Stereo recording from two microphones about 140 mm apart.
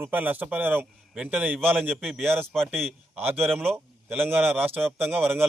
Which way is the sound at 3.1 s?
15° right (ahead or behind).